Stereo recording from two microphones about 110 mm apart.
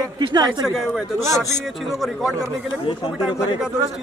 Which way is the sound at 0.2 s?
40° right (ahead or behind).